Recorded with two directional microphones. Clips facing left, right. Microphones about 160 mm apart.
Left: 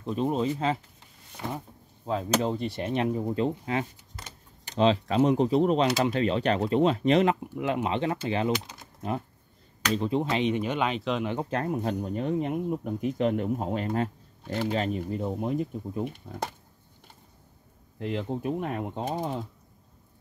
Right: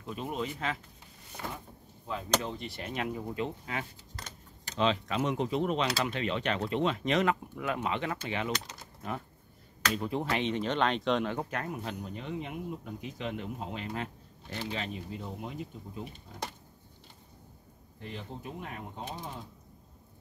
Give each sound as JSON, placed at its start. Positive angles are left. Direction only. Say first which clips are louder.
{"t": 0.0, "sound": "speech", "louder": "left 9 dB", "side_deg": 35}
{"t": 2.0, "sound": "speech", "louder": "left 6 dB", "side_deg": 35}
{"t": 9.9, "sound": "speech", "louder": "left 6 dB", "side_deg": 20}
{"t": 11.5, "sound": "speech", "louder": "left 8 dB", "side_deg": 35}
{"t": 17.9, "sound": "speech", "louder": "left 11 dB", "side_deg": 65}
{"t": 19.0, "sound": "speech", "louder": "left 11 dB", "side_deg": 50}